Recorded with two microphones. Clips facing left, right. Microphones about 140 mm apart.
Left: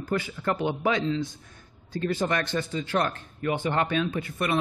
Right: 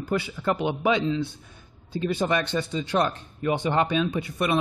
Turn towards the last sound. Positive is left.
turn(degrees=-20)  # may be behind; listen again after turning